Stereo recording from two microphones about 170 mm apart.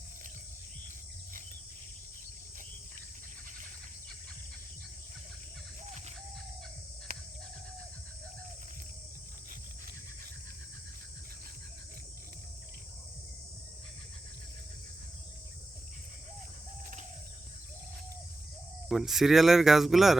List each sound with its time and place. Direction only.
5.8 s cricket: 45° right (ahead or behind)
7.1 s a sound: 60° right (ahead or behind)
18.9 s speech: centre (ahead or behind)